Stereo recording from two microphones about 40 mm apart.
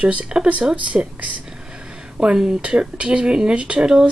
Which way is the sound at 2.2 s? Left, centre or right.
Centre.